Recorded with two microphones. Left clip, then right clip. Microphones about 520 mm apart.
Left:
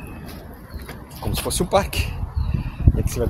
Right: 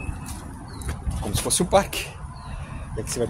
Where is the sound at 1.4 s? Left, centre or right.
Right.